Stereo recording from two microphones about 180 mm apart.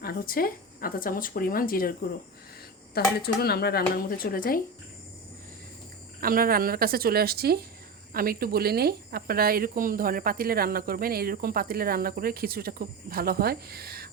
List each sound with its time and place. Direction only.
0.0 s speech: 55° left (ahead or behind)
2.9 s speech: 60° left (ahead or behind)
6.1 s speech: 55° right (ahead or behind)